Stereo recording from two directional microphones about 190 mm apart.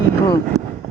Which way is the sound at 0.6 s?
35° right (ahead or behind).